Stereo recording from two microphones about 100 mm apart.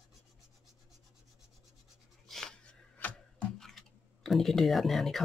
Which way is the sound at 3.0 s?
10° left (ahead or behind).